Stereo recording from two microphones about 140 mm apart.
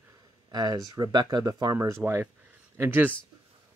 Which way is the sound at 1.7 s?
20° right (ahead or behind).